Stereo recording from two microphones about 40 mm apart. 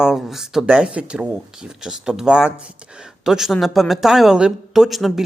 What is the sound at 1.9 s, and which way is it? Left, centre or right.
A woman's voice, centre.